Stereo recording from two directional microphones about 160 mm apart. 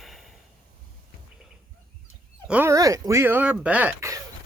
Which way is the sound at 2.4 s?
10° right (ahead or behind).